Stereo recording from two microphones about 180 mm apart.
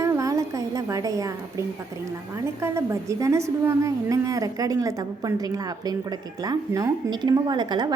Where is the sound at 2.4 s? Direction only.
15° right (ahead or behind).